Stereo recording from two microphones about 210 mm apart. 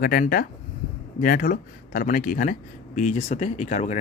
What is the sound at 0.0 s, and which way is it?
Speech, 45° left (ahead or behind).